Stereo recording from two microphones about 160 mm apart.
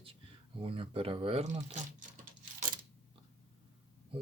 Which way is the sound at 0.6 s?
35° right (ahead or behind).